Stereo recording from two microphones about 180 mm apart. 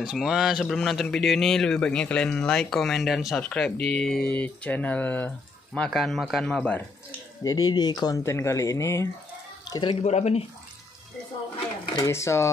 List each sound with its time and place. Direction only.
0.0 s speech: centre (ahead or behind)
7.4 s speech: 20° left (ahead or behind)
10.0 s speech: 35° left (ahead or behind)
11.9 s speech: 15° left (ahead or behind)